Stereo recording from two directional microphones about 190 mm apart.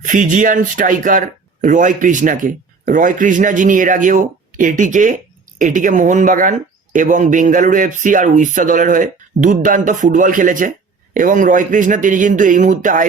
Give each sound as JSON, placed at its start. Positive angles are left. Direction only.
{"t": 0.0, "sound": "speech", "side_deg": -40}